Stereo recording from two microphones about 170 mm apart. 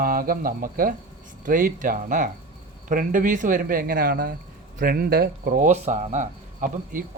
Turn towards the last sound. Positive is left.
turn(degrees=-50)  # may be behind; listen again after turning